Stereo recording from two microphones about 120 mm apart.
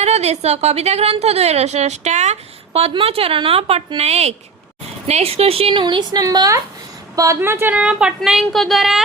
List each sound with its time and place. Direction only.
0.0 s a woman's voice: 65° right (ahead or behind); by 9.0 s centre (ahead or behind)